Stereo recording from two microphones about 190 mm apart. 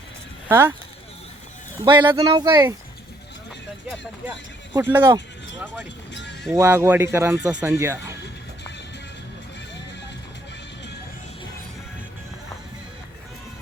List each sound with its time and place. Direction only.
0.4 s speech: 10° right (ahead or behind)
1.8 s speech: 25° right (ahead or behind)
2.5 s speech: 15° right (ahead or behind)
4.8 s speech: 10° right (ahead or behind)
6.5 s speech: 10° right (ahead or behind)